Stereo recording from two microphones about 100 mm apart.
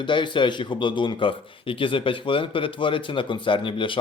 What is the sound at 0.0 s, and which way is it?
A man's voice, 50° left (ahead or behind).